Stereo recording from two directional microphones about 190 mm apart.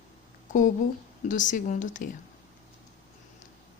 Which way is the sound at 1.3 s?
40° left (ahead or behind).